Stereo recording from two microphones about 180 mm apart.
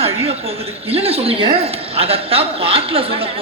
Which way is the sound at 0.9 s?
35° right (ahead or behind).